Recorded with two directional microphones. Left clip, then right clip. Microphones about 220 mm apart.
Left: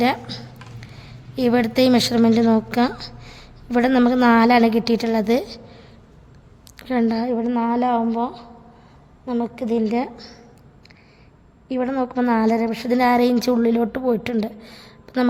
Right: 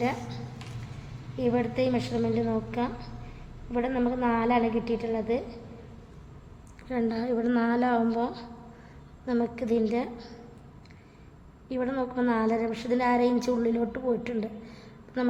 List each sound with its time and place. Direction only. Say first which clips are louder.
0.0 s a woman's voice: left 10 dB; 50° left (ahead or behind)
1.4 s a woman's voice: left 9 dB; 55° left (ahead or behind)
6.7 s a woman's voice: left 8 dB; 40° left (ahead or behind)
11.7 s a woman's voice: left 7 dB; 40° left (ahead or behind)